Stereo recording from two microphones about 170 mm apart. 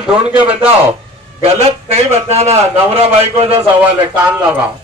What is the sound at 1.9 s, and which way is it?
A man's voice, 40° right (ahead or behind).